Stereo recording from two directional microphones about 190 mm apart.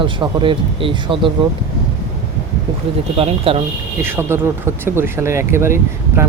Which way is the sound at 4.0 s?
10° right (ahead or behind).